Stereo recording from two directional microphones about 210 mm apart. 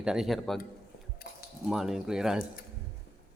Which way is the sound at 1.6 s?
Centre (ahead or behind).